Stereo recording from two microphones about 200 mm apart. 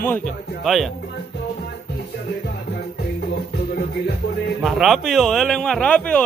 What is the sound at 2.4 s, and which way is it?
Music, 50° left (ahead or behind).